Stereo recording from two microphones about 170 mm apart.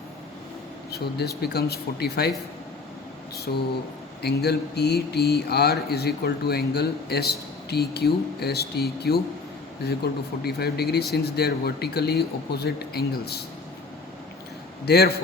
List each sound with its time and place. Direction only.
0.9 s speech: 70° left (ahead or behind)
3.3 s speech: 70° left (ahead or behind)
10.4 s speech: 70° left (ahead or behind)
14.8 s speech: 70° left (ahead or behind)